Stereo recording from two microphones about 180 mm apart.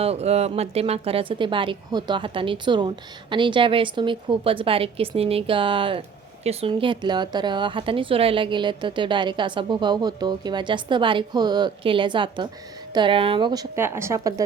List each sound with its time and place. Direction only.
0.0 s a woman's voice: 35° right (ahead or behind); by 14.4 s 15° right (ahead or behind)